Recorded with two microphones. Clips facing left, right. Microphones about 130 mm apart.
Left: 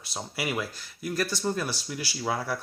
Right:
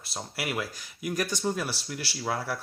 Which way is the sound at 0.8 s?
15° right (ahead or behind).